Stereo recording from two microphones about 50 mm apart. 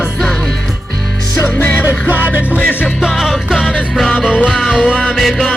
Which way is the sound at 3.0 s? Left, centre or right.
Centre.